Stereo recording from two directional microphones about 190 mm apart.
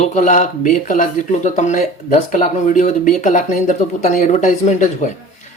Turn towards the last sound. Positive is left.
turn(degrees=40)  # may be behind; listen again after turning